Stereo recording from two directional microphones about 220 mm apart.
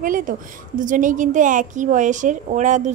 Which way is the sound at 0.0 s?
40° right (ahead or behind).